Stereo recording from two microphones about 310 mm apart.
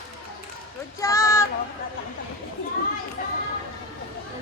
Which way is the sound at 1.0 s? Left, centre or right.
Centre.